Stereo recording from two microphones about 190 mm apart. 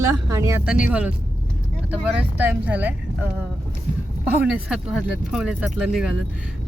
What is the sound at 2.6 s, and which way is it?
Speech, 10° right (ahead or behind).